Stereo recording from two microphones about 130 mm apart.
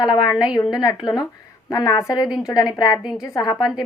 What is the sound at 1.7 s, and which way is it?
A woman's voice, 25° left (ahead or behind).